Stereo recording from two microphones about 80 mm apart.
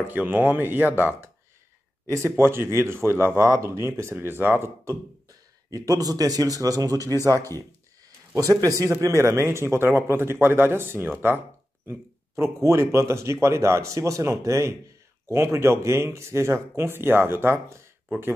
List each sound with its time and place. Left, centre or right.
0.0 s speech: right
2.0 s speech: right
5.7 s speech: right
9.0 s speech: right